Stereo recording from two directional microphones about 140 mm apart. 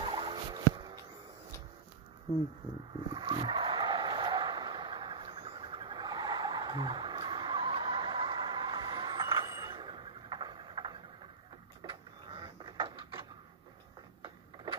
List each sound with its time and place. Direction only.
0.0 s fowl: 35° right (ahead or behind)
3.1 s vehicle: 35° right (ahead or behind)
11.8 s printer: 35° right (ahead or behind)